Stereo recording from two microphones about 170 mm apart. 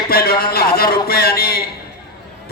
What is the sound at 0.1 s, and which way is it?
A man's voice, 60° left (ahead or behind).